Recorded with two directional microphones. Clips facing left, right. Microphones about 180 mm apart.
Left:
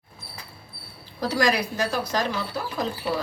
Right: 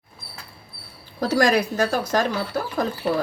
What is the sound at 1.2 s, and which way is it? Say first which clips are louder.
Speech: right 4 dB; 50° right (ahead or behind).